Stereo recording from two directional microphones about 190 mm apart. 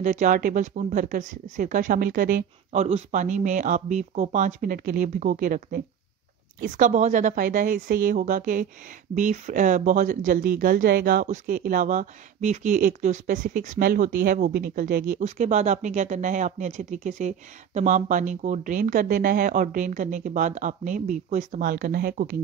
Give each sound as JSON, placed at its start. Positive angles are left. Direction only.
{"t": 0.0, "sound": "speech", "side_deg": -40}